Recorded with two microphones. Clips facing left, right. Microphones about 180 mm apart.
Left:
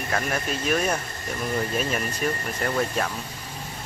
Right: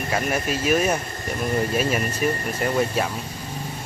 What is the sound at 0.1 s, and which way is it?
Speech, 10° right (ahead or behind).